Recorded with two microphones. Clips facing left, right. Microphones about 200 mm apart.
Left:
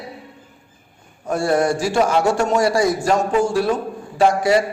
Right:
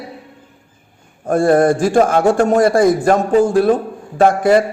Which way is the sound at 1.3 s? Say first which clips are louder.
Right 6 dB; 50° right (ahead or behind).